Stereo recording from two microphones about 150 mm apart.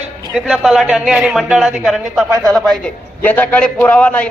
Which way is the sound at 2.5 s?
5° left (ahead or behind).